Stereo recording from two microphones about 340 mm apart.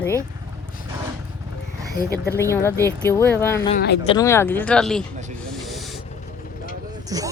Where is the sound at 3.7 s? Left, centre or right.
Left.